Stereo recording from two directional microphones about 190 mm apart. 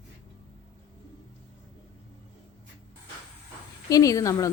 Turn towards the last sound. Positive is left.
turn(degrees=15)  # may be behind; listen again after turning